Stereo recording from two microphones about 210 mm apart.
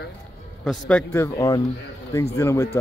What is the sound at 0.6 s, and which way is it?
A man's voice, 5° left (ahead or behind).